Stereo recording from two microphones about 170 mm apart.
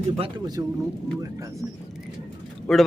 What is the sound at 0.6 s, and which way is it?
Speech, 20° right (ahead or behind).